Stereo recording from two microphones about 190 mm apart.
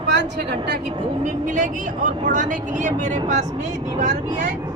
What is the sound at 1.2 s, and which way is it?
Speech, 45° right (ahead or behind).